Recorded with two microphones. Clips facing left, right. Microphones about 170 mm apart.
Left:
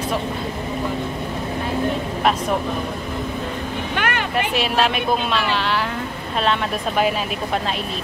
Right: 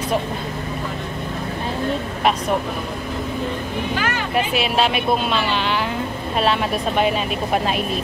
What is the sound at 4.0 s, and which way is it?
Speech, 65° left (ahead or behind).